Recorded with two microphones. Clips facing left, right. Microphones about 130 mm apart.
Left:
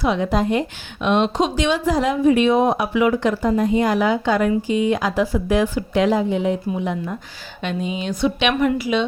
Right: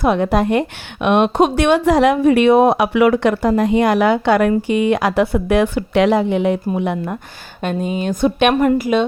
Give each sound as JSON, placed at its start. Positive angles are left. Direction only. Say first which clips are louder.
{"t": 0.0, "sound": "speech", "louder": "right 4 dB", "side_deg": -55}
{"t": 7.6, "sound": "a woman's voice", "louder": "right 4 dB", "side_deg": -45}